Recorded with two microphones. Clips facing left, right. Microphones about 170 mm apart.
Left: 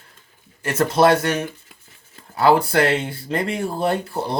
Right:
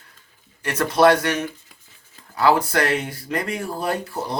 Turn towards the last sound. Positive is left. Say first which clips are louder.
# left 3 dB
turn(degrees=30)  # may be behind; listen again after turning